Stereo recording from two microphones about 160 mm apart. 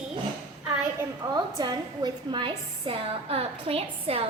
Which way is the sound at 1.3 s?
25° right (ahead or behind).